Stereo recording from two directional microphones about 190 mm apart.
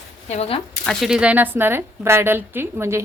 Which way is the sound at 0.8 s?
Centre (ahead or behind).